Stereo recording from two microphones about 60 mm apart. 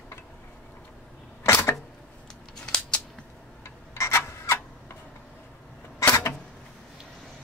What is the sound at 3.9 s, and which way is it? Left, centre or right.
Rub, left.